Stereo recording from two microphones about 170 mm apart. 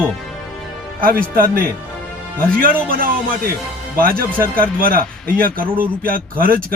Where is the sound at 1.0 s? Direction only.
55° right (ahead or behind).